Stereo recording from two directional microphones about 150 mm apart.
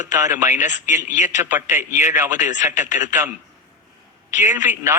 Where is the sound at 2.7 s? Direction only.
55° left (ahead or behind).